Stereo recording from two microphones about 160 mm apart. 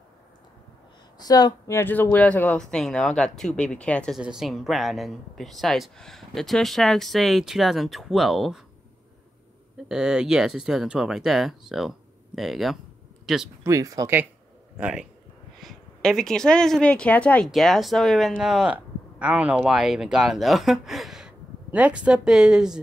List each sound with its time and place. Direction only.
1.2 s speech: 25° left (ahead or behind); by 4.2 s 5° left (ahead or behind)
4.2 s a woman's voice: 5° right (ahead or behind)
9.8 s a woman's voice: 5° right (ahead or behind)
13.7 s speech: 20° right (ahead or behind)
14.8 s a woman's voice: 5° right (ahead or behind)